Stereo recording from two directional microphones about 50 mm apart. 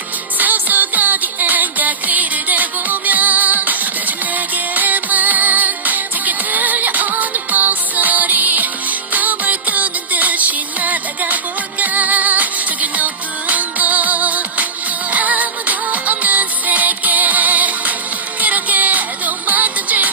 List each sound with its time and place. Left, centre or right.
0.3 s music: right